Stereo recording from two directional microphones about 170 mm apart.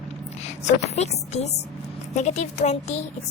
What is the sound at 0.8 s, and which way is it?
A woman's voice, 40° left (ahead or behind).